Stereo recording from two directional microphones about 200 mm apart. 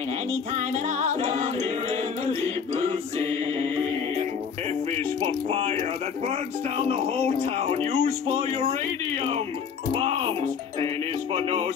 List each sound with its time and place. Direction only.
0.3 s music: 35° right (ahead or behind)
4.9 s speech: 30° right (ahead or behind)
9.9 s music: 30° right (ahead or behind)
11.3 s speech: 25° right (ahead or behind)